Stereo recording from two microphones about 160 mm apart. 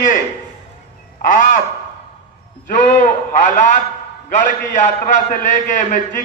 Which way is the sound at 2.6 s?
55° left (ahead or behind).